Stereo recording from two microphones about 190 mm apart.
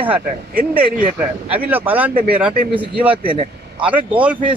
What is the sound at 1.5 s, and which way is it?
Speech, 10° right (ahead or behind).